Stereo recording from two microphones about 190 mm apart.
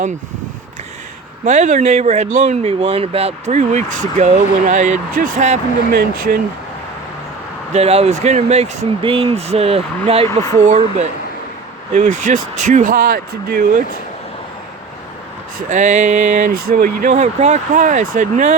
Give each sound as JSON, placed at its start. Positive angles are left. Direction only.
{"t": 1.5, "sound": "speech", "side_deg": -40}
{"t": 5.9, "sound": "speech", "side_deg": -55}
{"t": 7.7, "sound": "speech", "side_deg": -35}
{"t": 15.5, "sound": "speech", "side_deg": -40}